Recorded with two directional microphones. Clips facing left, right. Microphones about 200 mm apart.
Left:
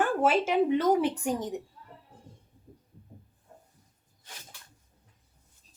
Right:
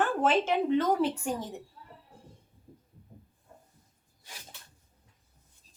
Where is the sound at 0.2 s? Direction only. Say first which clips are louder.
Left 3 dB; 10° left (ahead or behind).